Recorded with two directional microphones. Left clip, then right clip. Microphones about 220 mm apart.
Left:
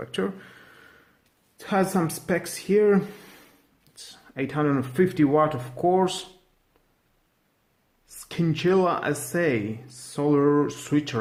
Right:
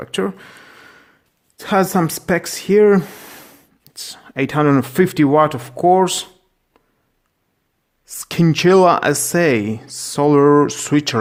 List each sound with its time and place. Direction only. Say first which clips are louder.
0.0 s a sound: right 7 dB; 35° right (ahead or behind)
1.5 s speech: right 8 dB; 40° right (ahead or behind)
8.0 s speech: right 10 dB; 40° right (ahead or behind)